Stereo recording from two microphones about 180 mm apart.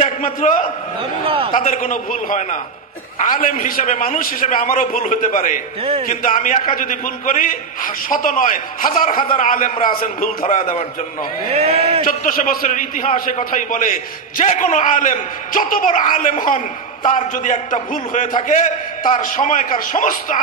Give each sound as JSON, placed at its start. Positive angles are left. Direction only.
{"t": 0.0, "sound": "a man's voice", "side_deg": 45}
{"t": 1.2, "sound": "speech", "side_deg": -30}
{"t": 1.6, "sound": "a man's voice", "side_deg": 45}
{"t": 11.5, "sound": "speech", "side_deg": -35}
{"t": 12.2, "sound": "a man's voice", "side_deg": 50}